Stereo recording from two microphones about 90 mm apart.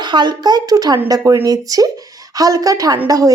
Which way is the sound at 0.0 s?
55° right (ahead or behind).